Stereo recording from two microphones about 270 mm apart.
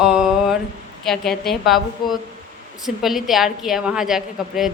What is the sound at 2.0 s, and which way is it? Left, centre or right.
Speech, centre.